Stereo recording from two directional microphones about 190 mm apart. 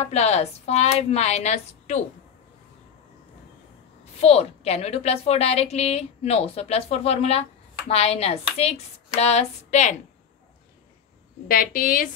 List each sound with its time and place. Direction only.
0.0 s a woman's voice: 35° left (ahead or behind)
4.2 s a woman's voice: 35° left (ahead or behind)
11.4 s a woman's voice: 50° left (ahead or behind)